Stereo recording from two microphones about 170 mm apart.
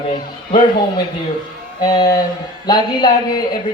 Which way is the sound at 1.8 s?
25° left (ahead or behind).